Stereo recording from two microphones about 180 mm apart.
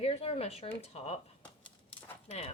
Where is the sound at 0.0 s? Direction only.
35° left (ahead or behind).